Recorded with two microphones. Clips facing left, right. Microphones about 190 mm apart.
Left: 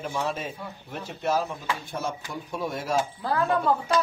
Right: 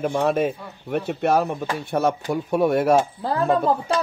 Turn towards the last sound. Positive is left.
turn(degrees=-25)  # may be behind; listen again after turning